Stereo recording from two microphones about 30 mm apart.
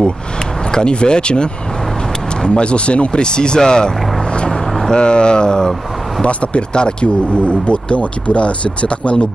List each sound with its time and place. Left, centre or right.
0.7 s speech: left
4.5 s vehicle: centre
4.9 s speech: left
6.2 s speech: left